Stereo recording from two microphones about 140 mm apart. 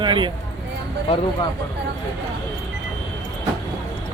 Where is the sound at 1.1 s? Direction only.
45° left (ahead or behind).